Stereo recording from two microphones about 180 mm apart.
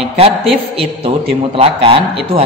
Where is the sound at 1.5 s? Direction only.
30° right (ahead or behind).